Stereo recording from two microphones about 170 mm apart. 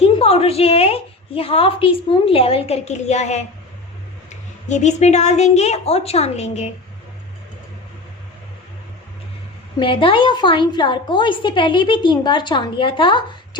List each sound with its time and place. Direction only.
0.2 s a woman's voice: 35° left (ahead or behind)
9.7 s a woman's voice: 30° left (ahead or behind)